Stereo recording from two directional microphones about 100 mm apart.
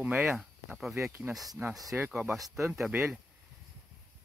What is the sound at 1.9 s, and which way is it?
Speech, 15° right (ahead or behind).